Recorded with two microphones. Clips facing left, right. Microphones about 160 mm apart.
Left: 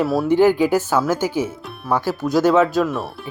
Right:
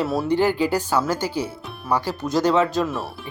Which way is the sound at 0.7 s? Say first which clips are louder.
Left 3 dB; 10° right (ahead or behind).